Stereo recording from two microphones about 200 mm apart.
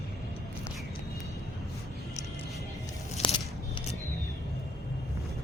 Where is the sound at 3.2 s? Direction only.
35° left (ahead or behind).